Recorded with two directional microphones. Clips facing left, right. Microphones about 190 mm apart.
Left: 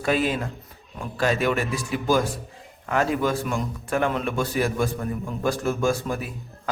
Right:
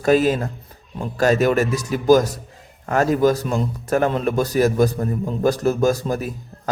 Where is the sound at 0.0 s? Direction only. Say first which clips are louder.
Right 7 dB; 40° right (ahead or behind).